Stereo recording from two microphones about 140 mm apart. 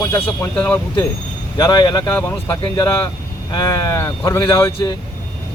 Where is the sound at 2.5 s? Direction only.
30° left (ahead or behind).